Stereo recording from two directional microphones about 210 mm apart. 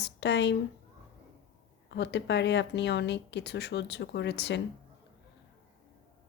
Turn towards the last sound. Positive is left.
turn(degrees=55)  # may be behind; listen again after turning